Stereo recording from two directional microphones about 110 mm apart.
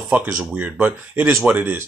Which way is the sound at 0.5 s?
15° right (ahead or behind).